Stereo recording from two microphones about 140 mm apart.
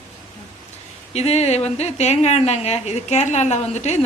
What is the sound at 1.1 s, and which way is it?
A woman's voice, 50° left (ahead or behind).